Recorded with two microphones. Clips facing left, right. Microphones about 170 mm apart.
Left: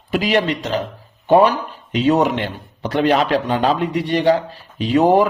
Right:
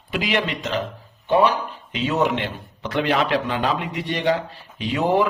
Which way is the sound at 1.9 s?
40° left (ahead or behind).